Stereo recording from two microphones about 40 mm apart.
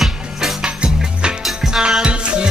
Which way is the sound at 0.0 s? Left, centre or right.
Centre.